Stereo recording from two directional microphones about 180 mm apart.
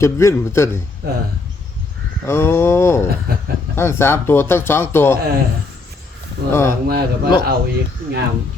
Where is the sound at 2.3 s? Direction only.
15° left (ahead or behind).